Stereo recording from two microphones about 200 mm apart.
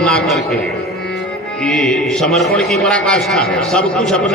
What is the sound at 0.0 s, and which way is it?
Music, 5° left (ahead or behind).